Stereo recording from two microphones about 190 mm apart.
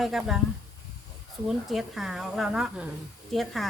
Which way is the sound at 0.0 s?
Centre (ahead or behind).